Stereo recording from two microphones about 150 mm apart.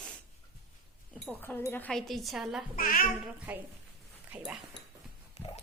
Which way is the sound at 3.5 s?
10° right (ahead or behind).